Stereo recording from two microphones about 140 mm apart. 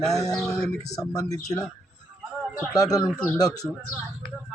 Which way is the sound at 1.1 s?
20° left (ahead or behind).